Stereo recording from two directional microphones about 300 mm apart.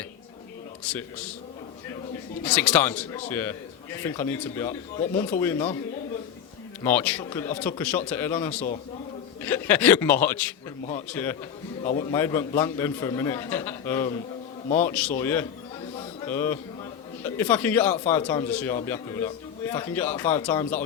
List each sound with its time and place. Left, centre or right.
2.4 s a man's voice: centre
6.8 s a man's voice: centre
11.8 s a man's voice: left
12.1 s a man's voice: centre
16.0 s a sound: centre
17.2 s a man's voice: centre